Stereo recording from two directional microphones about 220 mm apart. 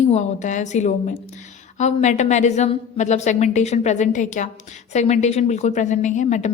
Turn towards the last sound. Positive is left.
turn(degrees=30)  # may be behind; listen again after turning